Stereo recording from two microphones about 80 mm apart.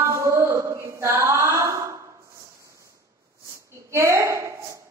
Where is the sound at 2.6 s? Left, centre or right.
Right.